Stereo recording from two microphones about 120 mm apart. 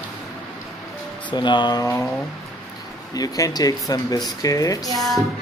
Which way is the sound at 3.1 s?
30° left (ahead or behind).